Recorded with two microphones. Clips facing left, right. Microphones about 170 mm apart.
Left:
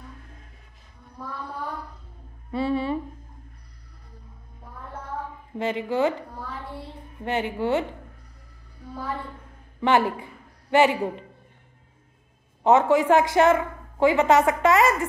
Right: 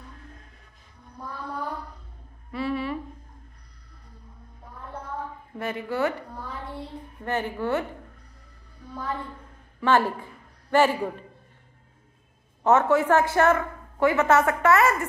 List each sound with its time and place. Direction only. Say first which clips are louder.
2.5 s a sound: left 4 dB; 30° left (ahead or behind)
5.6 s a woman's voice: left 3 dB; 20° left (ahead or behind)
7.2 s a woman's voice: left 2 dB; 15° left (ahead or behind)
9.8 s a woman's voice: left 1 dB; 15° left (ahead or behind)
12.6 s a woman's voice: left 2 dB; 15° left (ahead or behind)